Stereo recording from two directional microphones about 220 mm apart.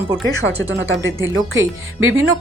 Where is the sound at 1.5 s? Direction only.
65° right (ahead or behind).